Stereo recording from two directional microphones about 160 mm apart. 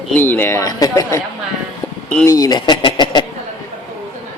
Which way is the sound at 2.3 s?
25° left (ahead or behind).